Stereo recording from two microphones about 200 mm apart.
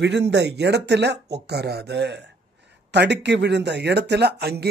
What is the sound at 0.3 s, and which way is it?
Speech, 60° right (ahead or behind).